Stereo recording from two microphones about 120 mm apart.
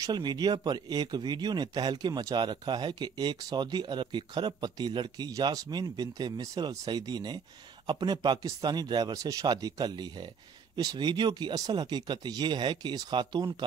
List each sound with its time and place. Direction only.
0.0 s speech: 35° right (ahead or behind)